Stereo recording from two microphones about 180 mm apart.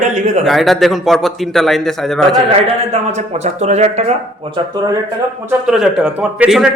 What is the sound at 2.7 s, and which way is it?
A man's voice, 40° right (ahead or behind).